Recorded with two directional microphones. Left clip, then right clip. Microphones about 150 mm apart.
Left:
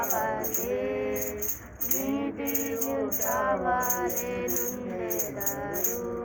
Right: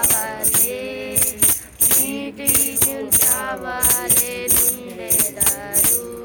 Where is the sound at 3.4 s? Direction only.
25° right (ahead or behind).